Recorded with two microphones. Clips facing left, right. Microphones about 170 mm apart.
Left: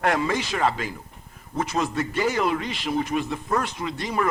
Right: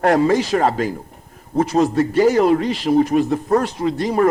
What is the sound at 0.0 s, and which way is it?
A man's voice, 40° right (ahead or behind).